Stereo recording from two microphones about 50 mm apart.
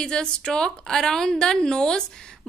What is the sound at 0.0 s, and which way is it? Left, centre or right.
A woman's voice, centre.